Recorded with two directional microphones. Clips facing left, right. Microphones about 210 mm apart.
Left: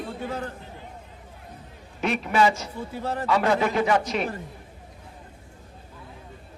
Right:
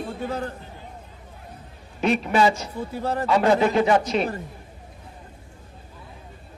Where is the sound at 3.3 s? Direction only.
25° right (ahead or behind).